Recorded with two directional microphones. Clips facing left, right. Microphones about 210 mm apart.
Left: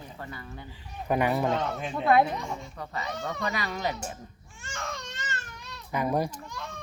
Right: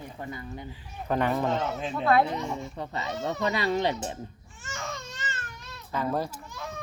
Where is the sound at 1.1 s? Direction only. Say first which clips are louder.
Left 1 dB; 10° left (ahead or behind).